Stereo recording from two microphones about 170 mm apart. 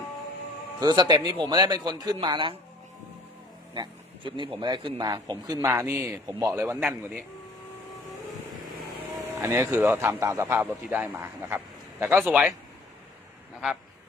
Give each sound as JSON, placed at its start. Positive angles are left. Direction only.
{"t": 0.8, "sound": "a man's voice", "side_deg": -25}
{"t": 3.8, "sound": "a man's voice", "side_deg": -30}
{"t": 9.1, "sound": "speech", "side_deg": -15}